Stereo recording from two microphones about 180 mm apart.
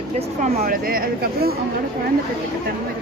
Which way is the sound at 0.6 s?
55° right (ahead or behind).